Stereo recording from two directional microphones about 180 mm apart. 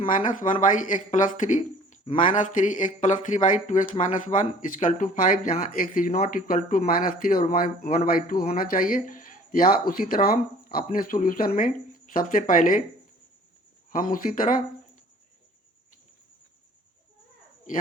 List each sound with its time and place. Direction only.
0.1 s speech: 45° left (ahead or behind)
13.9 s speech: 50° left (ahead or behind)